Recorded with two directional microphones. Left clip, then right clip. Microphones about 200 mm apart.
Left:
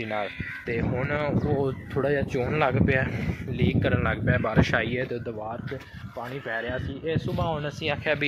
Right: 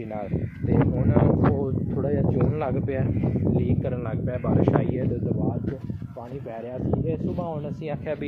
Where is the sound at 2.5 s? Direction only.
5° left (ahead or behind).